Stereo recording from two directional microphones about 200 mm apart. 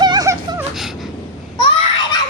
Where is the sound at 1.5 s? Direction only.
25° left (ahead or behind).